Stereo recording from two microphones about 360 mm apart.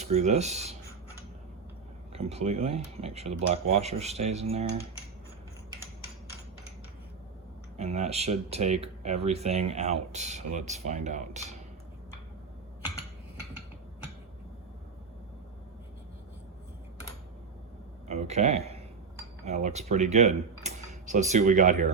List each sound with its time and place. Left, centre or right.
0.0 s speech: centre
2.1 s speech: centre
7.8 s speech: centre
18.1 s speech: centre